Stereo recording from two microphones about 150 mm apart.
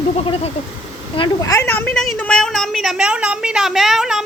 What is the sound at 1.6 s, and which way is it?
A woman's voice, 10° left (ahead or behind).